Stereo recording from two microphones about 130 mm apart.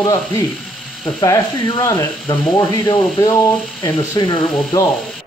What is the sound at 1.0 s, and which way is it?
Speech, 25° left (ahead or behind).